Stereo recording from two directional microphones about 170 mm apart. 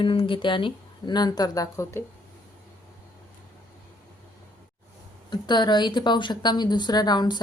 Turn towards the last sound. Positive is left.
turn(degrees=25)  # may be behind; listen again after turning